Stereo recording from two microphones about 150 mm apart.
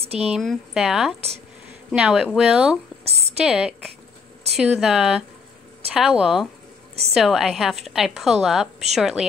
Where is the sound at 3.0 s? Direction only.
40° right (ahead or behind).